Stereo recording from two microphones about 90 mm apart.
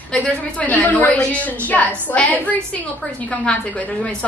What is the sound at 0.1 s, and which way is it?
A woman's voice, 15° left (ahead or behind).